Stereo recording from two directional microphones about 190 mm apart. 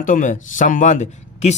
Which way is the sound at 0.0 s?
45° left (ahead or behind).